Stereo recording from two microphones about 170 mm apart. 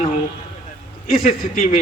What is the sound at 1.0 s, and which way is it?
Speech, 55° left (ahead or behind).